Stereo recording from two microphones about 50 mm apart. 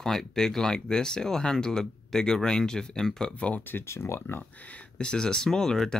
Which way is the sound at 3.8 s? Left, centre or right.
Left.